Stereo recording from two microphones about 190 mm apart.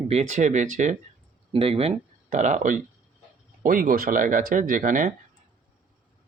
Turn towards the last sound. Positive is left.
turn(degrees=-45)  # may be behind; listen again after turning